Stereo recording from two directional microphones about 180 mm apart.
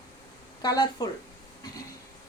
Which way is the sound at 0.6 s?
20° left (ahead or behind).